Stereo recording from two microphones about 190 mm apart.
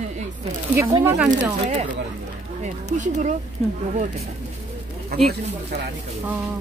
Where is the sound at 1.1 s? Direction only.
5° right (ahead or behind).